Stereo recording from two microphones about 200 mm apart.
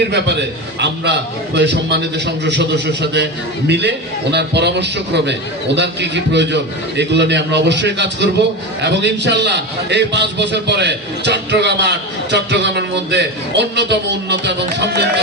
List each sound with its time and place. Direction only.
0.1 s a man's voice: 60° right (ahead or behind)